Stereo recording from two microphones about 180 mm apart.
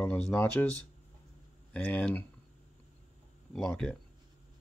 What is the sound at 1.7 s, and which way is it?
Speech, 10° left (ahead or behind).